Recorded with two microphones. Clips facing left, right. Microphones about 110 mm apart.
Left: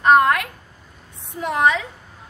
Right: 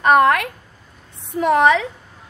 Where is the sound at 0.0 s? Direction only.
70° right (ahead or behind).